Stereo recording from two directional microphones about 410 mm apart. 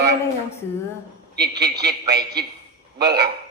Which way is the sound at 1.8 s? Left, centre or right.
Right.